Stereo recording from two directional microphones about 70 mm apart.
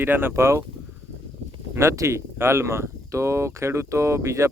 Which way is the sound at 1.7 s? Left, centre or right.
Right.